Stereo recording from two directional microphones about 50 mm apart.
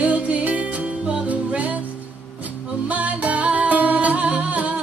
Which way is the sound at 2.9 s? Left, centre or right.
Right.